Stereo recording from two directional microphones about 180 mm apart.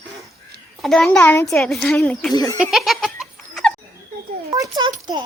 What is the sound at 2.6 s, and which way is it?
Laughter, centre (ahead or behind).